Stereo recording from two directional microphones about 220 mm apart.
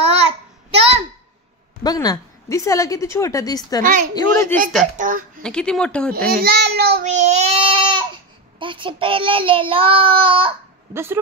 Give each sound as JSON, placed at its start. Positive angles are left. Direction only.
{"t": 0.0, "sound": "child singing", "side_deg": -25}
{"t": 0.7, "sound": "a sound", "side_deg": -25}
{"t": 1.8, "sound": "a woman's voice", "side_deg": 15}
{"t": 4.9, "sound": "speech", "side_deg": -35}
{"t": 5.4, "sound": "speech", "side_deg": 5}
{"t": 6.4, "sound": "a child's voice", "side_deg": -45}
{"t": 7.1, "sound": "a sound", "side_deg": -30}
{"t": 8.5, "sound": "child singing", "side_deg": -20}
{"t": 10.9, "sound": "speech", "side_deg": -10}